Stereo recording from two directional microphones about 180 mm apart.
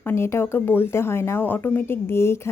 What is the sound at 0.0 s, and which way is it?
Speech, 15° left (ahead or behind).